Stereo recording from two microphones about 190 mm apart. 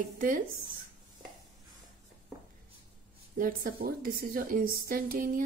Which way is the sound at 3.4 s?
50° right (ahead or behind).